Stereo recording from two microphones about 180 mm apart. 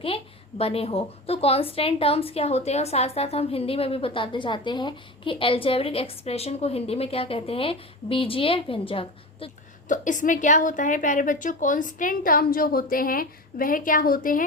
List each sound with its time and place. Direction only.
0.6 s a woman's voice: 35° left (ahead or behind)
9.9 s a woman's voice: 45° left (ahead or behind)